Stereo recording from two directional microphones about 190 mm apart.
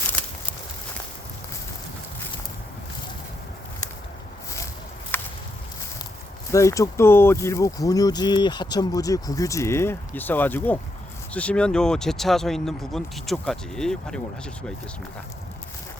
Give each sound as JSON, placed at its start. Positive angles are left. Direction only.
{"t": 5.1, "sound": "walk", "side_deg": 10}
{"t": 6.5, "sound": "speech", "side_deg": 15}